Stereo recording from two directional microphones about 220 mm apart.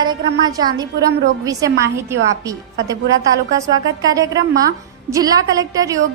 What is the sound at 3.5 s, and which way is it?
A woman's voice, 15° right (ahead or behind).